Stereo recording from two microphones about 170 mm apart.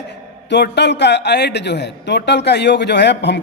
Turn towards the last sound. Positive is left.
turn(degrees=90)